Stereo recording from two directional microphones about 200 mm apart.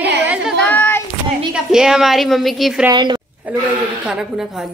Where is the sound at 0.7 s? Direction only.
10° left (ahead or behind).